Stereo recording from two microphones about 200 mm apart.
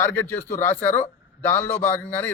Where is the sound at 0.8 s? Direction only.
35° left (ahead or behind).